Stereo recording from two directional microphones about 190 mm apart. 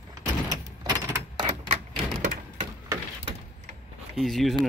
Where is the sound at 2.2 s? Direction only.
40° right (ahead or behind).